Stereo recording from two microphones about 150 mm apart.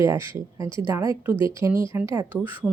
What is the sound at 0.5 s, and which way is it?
Speech, 25° right (ahead or behind).